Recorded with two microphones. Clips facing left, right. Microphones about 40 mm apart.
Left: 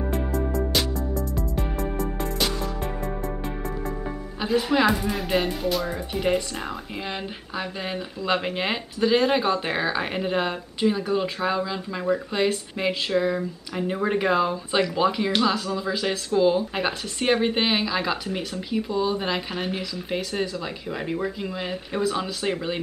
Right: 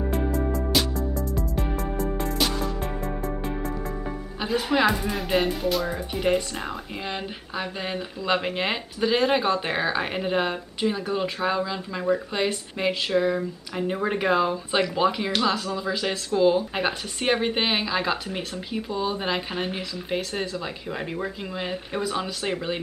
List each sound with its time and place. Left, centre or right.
0.0 s music: centre
4.4 s speech: centre